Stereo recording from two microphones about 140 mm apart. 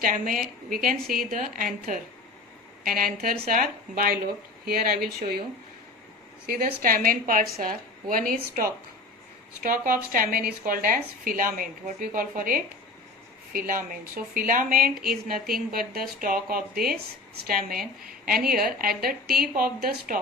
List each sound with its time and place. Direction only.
0.0 s speech: 85° right
2.8 s a woman's voice: 90° right
6.5 s a woman's voice: 90° right